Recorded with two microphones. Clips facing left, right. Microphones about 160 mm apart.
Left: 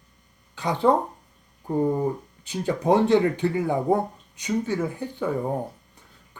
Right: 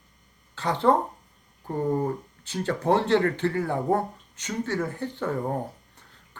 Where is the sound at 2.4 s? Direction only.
15° left (ahead or behind).